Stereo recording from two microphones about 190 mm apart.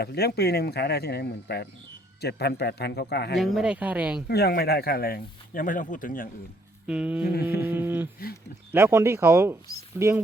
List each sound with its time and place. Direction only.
0.0 s speech: 55° left (ahead or behind)
3.3 s speech: centre (ahead or behind)
4.3 s speech: 55° left (ahead or behind)
6.8 s speech: 5° right (ahead or behind)